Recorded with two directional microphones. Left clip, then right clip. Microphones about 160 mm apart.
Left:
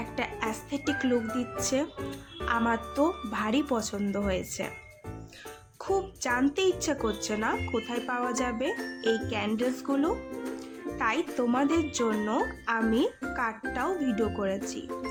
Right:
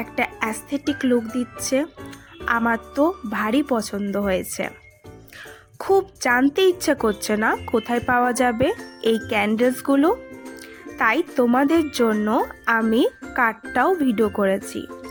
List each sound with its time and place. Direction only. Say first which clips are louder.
0.2 s speech: right 9 dB; 40° right (ahead or behind)
5.8 s speech: right 10 dB; 45° right (ahead or behind)